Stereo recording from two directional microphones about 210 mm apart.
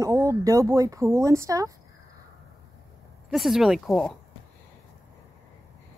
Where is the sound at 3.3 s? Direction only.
Centre (ahead or behind).